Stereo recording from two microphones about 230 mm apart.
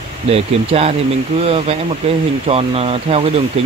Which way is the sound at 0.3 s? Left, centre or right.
Right.